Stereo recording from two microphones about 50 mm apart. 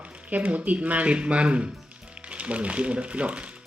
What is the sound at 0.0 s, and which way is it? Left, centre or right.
Speech, right.